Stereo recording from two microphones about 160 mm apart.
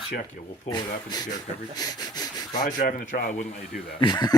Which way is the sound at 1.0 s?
25° left (ahead or behind).